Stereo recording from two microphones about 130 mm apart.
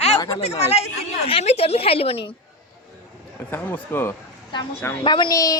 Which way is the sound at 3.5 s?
15° left (ahead or behind).